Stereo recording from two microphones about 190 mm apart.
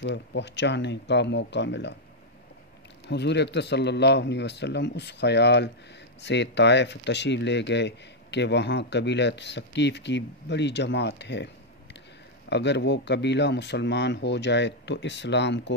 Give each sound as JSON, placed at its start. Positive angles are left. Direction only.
{"t": 0.0, "sound": "speech", "side_deg": 65}
{"t": 3.1, "sound": "speech", "side_deg": 65}